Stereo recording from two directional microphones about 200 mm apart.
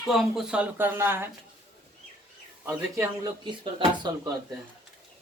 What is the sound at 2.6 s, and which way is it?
Speech, 15° right (ahead or behind).